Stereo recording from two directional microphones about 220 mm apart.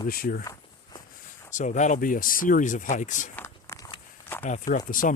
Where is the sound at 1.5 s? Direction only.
35° left (ahead or behind).